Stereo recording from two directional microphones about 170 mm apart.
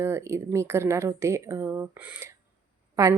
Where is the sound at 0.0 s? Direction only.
15° right (ahead or behind).